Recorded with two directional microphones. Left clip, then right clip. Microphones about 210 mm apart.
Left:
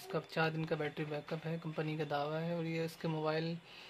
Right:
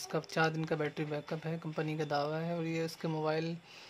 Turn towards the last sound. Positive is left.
turn(degrees=-15)  # may be behind; listen again after turning